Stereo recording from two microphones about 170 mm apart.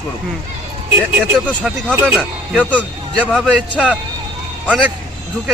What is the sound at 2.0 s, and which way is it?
Speech, 5° left (ahead or behind).